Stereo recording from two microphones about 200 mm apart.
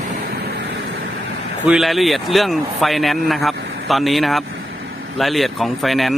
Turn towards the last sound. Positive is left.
turn(degrees=0)  # may be behind; listen again after turning